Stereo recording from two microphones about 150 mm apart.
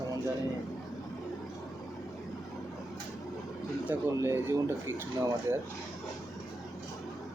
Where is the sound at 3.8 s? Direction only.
15° right (ahead or behind).